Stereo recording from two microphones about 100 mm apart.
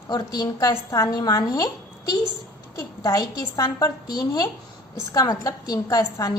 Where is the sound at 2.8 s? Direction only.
35° left (ahead or behind).